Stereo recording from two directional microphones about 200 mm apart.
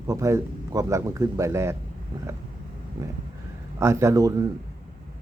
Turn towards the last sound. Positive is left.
turn(degrees=-15)  # may be behind; listen again after turning